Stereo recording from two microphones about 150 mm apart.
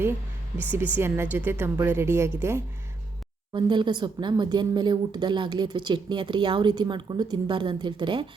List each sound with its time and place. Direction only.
0.5 s a woman's voice: 15° right (ahead or behind)
3.5 s a woman's voice: 30° right (ahead or behind)